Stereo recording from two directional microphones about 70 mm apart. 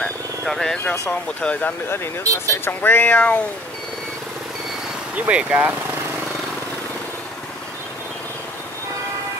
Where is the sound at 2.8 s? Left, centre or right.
Left.